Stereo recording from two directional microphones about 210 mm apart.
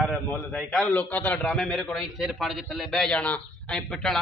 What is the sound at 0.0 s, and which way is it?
A man's voice, 5° left (ahead or behind).